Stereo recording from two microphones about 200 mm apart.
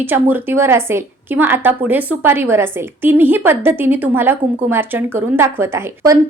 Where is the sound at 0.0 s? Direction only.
10° right (ahead or behind).